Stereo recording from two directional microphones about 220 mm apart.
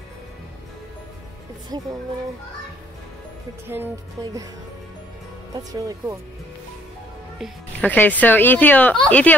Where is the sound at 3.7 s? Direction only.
10° right (ahead or behind).